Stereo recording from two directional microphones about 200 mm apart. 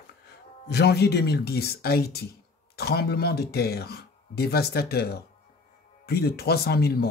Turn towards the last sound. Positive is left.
turn(degrees=50)  # may be behind; listen again after turning